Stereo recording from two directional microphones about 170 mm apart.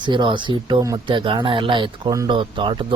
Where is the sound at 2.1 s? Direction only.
20° right (ahead or behind).